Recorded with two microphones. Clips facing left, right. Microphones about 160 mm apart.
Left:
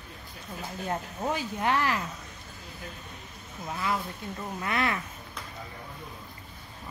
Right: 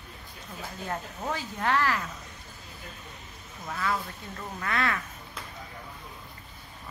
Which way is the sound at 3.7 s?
20° left (ahead or behind).